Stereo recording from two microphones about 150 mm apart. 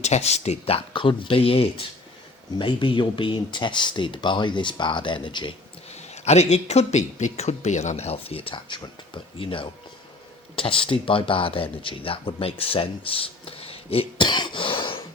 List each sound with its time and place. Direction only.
0.0 s speech: 45° left (ahead or behind)
5.9 s speech: 45° left (ahead or behind)